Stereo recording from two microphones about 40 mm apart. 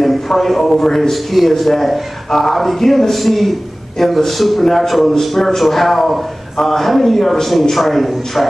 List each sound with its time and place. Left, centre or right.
0.0 s a man's voice: centre
1.1 s a man's voice: centre